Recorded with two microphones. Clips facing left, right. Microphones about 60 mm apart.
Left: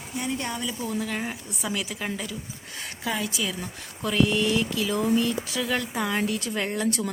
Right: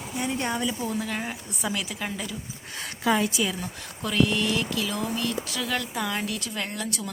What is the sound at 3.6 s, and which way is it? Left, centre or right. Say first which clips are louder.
Speech: left 1 dB; centre.